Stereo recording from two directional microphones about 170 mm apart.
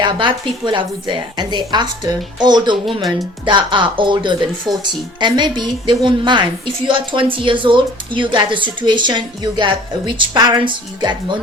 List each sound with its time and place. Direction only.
0.0 s speech: 25° right (ahead or behind)